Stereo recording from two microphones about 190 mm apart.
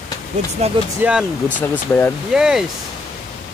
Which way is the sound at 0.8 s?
25° right (ahead or behind).